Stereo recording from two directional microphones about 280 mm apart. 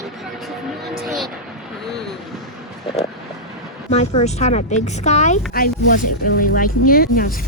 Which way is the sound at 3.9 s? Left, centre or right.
Left.